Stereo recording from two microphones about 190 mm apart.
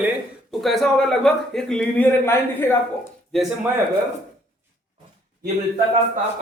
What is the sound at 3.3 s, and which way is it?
Speech, centre (ahead or behind).